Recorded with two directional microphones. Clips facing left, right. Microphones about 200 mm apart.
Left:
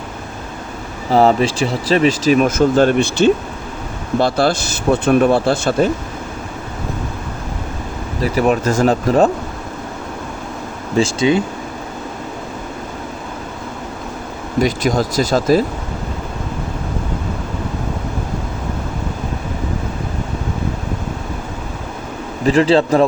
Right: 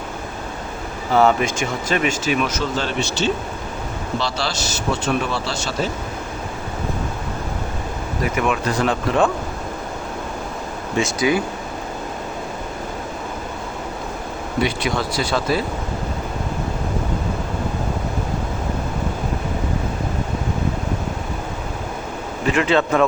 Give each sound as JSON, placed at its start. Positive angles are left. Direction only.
{"t": 1.1, "sound": "speech", "side_deg": 35}
{"t": 8.2, "sound": "speech", "side_deg": 35}
{"t": 10.9, "sound": "speech", "side_deg": 30}
{"t": 14.6, "sound": "speech", "side_deg": 45}
{"t": 22.4, "sound": "speech", "side_deg": 35}